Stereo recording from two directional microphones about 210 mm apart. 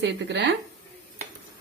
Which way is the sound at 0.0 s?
55° right (ahead or behind).